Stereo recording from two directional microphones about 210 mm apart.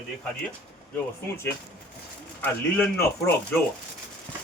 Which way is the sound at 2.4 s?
10° left (ahead or behind).